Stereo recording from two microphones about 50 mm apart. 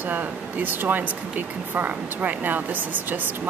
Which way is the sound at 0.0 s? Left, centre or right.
Right.